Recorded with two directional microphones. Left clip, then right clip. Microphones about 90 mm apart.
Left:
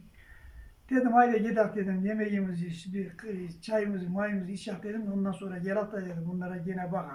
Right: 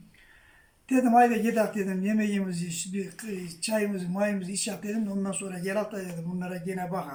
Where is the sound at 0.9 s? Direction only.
35° right (ahead or behind).